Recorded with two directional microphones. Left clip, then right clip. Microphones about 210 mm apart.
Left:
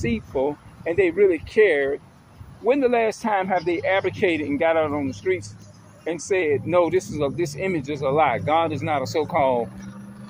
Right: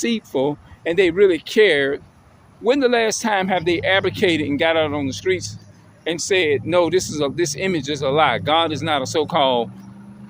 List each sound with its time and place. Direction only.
0.0 s speech: 40° right (ahead or behind)
7.9 s speech: 45° right (ahead or behind)
8.1 s speech: 35° right (ahead or behind)
9.2 s speech: 50° right (ahead or behind)